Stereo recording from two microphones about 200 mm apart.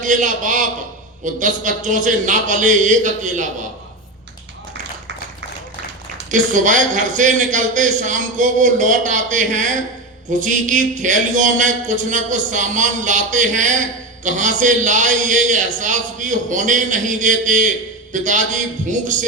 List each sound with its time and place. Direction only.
0.0 s a man's voice: 40° right (ahead or behind)
6.3 s a man's voice: 40° right (ahead or behind)